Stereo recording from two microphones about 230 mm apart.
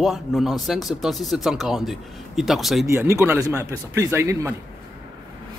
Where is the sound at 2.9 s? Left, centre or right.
Centre.